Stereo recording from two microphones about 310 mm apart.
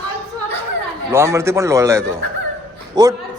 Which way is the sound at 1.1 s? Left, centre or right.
Centre.